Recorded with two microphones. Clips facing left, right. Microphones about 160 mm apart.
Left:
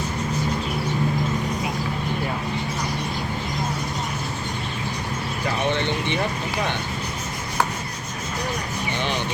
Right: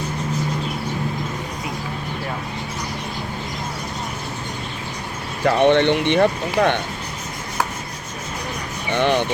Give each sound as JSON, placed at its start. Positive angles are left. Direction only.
{"t": 5.5, "sound": "speech", "side_deg": -65}
{"t": 8.9, "sound": "vehicle", "side_deg": -60}